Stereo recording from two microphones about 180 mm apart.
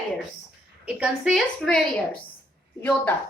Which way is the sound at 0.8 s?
5° right (ahead or behind).